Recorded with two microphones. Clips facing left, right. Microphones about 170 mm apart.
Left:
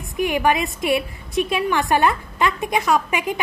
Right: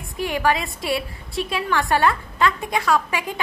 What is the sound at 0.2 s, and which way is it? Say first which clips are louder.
A woman's voice: left 3 dB; 20° left (ahead or behind).